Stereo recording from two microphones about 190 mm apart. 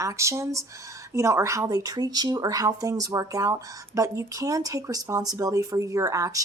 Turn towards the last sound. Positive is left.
turn(degrees=-15)  # may be behind; listen again after turning